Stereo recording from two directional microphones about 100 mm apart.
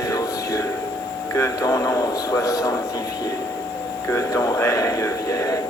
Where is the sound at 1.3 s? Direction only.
30° left (ahead or behind).